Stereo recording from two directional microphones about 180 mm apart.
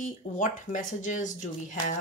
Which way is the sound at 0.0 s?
45° left (ahead or behind).